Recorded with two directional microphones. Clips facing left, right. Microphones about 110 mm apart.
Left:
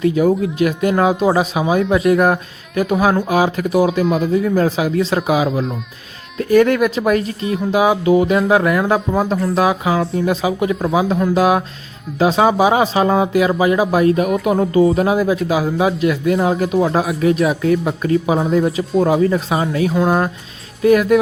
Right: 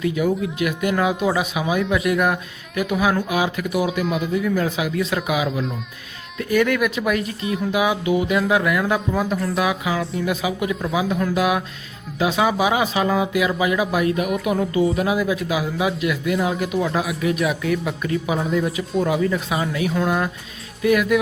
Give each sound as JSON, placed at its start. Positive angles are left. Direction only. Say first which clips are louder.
{"t": 0.0, "sound": "speech", "louder": "left 6 dB", "side_deg": 35}